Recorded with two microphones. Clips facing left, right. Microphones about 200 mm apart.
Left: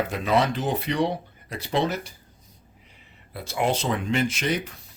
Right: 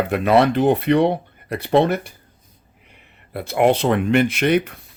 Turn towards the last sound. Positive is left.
turn(degrees=-60)  # may be behind; listen again after turning